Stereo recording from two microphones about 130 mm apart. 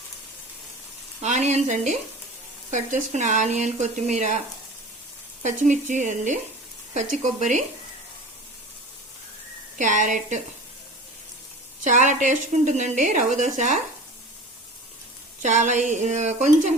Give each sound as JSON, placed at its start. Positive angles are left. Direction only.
{"t": 1.2, "sound": "frying", "side_deg": -60}
{"t": 2.6, "sound": "a woman's voice", "side_deg": -65}
{"t": 5.4, "sound": "a woman's voice", "side_deg": -70}
{"t": 9.7, "sound": "a woman's voice", "side_deg": -75}
{"t": 11.8, "sound": "a woman's voice", "side_deg": -70}
{"t": 15.4, "sound": "a woman's voice", "side_deg": -70}